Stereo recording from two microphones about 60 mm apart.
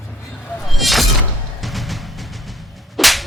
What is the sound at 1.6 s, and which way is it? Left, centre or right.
Music, centre.